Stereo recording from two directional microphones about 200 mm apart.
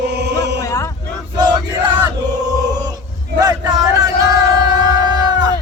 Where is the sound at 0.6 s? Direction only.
15° left (ahead or behind).